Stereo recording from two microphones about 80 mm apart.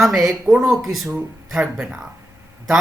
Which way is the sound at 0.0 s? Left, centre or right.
Centre.